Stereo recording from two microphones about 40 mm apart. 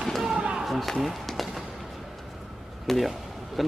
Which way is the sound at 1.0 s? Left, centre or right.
Centre.